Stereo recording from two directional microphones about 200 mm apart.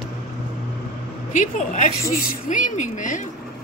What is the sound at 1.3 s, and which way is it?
Speech, 40° left (ahead or behind).